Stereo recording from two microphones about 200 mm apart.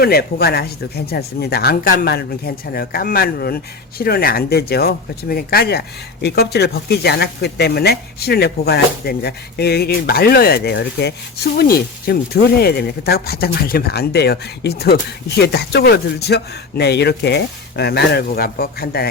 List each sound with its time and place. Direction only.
0.0 s speech: 50° left (ahead or behind)